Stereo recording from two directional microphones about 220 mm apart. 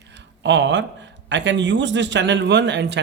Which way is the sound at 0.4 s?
55° right (ahead or behind).